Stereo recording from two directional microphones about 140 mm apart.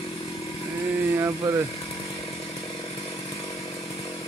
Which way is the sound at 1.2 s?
15° right (ahead or behind).